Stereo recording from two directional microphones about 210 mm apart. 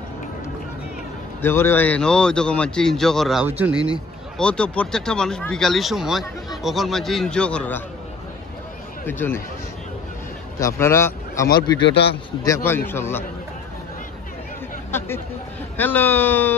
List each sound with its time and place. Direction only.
1.4 s speech: 10° left (ahead or behind); by 3.9 s 5° right (ahead or behind)
4.4 s speech: 5° left (ahead or behind)
9.0 s speech: 10° left (ahead or behind)
10.6 s a man's voice: 10° left (ahead or behind)
11.8 s a man's voice: 55° left (ahead or behind)
12.4 s speech: 10° left (ahead or behind)
14.9 s speech: 10° left (ahead or behind)